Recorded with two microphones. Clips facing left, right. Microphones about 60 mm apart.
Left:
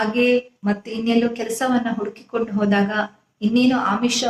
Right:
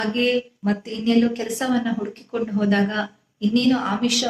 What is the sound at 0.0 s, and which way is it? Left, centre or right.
A woman's voice, left.